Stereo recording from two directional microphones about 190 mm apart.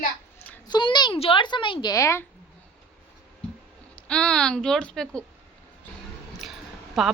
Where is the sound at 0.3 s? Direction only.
10° left (ahead or behind).